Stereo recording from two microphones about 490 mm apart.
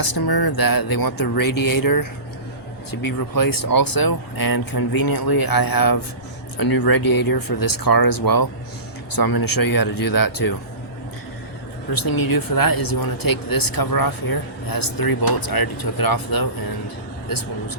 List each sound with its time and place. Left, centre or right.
0.0 s speech: left
11.9 s speech: left